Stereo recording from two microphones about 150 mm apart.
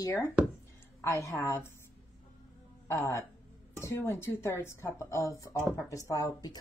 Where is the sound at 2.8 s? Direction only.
15° left (ahead or behind).